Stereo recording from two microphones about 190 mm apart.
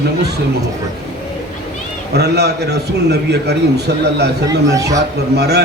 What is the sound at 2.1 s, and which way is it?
A man's voice, 60° right (ahead or behind).